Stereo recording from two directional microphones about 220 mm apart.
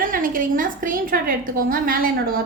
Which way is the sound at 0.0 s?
40° right (ahead or behind).